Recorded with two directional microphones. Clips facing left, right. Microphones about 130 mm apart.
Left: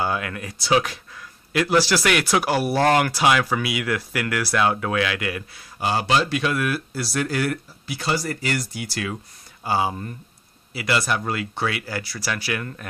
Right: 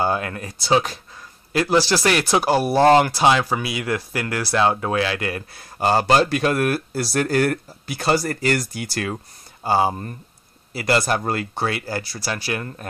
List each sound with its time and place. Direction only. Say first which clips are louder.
0.0 s a man's voice: right 3 dB; 35° right (ahead or behind)
9.7 s speech: right 4 dB; 35° right (ahead or behind)